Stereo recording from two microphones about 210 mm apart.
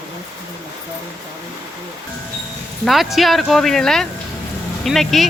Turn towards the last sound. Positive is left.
turn(degrees=0)  # may be behind; listen again after turning